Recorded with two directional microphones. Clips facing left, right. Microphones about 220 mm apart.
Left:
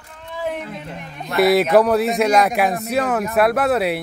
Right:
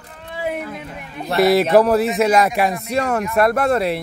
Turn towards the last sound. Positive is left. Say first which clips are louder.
# even
turn(degrees=0)  # may be behind; listen again after turning